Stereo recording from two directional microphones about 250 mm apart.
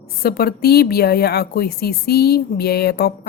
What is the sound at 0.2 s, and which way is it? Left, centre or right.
Speech, left.